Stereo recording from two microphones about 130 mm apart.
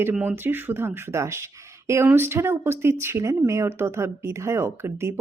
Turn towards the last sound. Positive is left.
turn(degrees=-20)  # may be behind; listen again after turning